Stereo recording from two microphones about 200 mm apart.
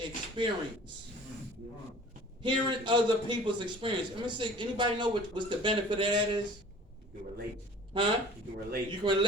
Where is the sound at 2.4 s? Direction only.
25° right (ahead or behind).